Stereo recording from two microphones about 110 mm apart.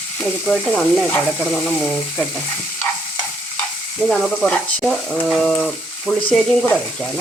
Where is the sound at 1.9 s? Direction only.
15° left (ahead or behind).